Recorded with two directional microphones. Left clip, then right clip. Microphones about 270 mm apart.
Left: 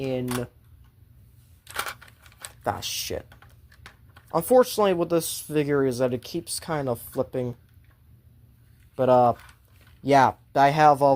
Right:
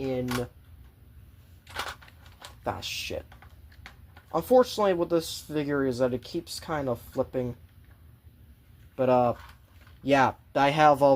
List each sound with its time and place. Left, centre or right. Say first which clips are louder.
0.0 s speech: left 2 dB; left
1.6 s a sound: left 3 dB; left
2.6 s typing: left 4 dB; left
4.3 s speech: left 2 dB; left
9.0 s speech: left 4 dB; left; by 11.1 s centre